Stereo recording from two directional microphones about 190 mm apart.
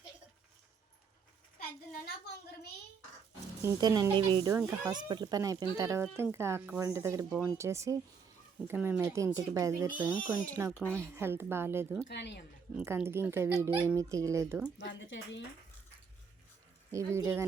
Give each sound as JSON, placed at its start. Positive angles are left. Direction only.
{"t": 3.6, "sound": "speech", "side_deg": -15}
{"t": 12.0, "sound": "speech", "side_deg": 65}
{"t": 12.7, "sound": "speech", "side_deg": -15}
{"t": 14.8, "sound": "speech", "side_deg": 65}
{"t": 17.2, "sound": "speech", "side_deg": -15}